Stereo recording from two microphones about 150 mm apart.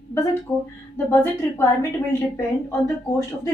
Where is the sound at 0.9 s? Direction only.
15° left (ahead or behind).